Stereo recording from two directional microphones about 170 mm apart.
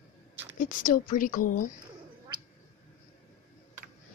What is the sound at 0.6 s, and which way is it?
Speech, 50° left (ahead or behind).